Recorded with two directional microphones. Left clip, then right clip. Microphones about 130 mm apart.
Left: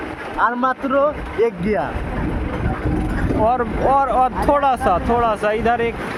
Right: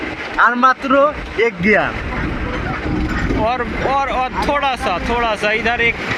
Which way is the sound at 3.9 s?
70° left (ahead or behind).